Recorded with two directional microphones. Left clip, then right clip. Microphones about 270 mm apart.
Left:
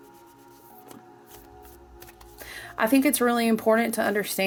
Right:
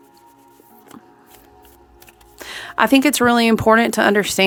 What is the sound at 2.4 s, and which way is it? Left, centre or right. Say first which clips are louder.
Speech: right 9 dB; right.